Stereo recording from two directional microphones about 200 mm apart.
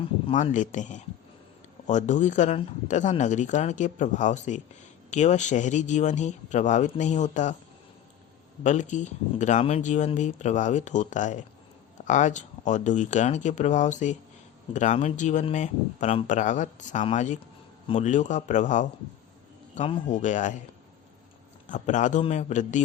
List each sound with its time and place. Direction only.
0.3 s speech: 40° left (ahead or behind)
8.6 s speech: 35° left (ahead or behind)
21.7 s speech: 40° left (ahead or behind)